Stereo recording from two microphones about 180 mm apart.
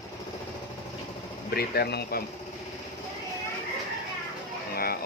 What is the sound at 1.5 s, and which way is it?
Speech, 60° left (ahead or behind).